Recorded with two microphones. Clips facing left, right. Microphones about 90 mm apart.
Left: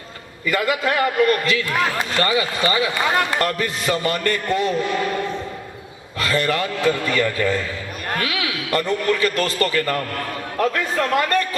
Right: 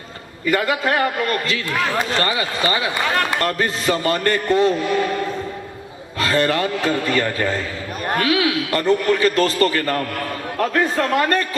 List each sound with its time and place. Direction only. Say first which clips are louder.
0.4 s a man's voice: right 1 dB; 35° right (ahead or behind)
6.1 s a man's voice: right 2 dB; 35° right (ahead or behind)
8.0 s a sound: right 6 dB; 35° right (ahead or behind)
8.8 s a man's voice: right 4 dB; 35° right (ahead or behind)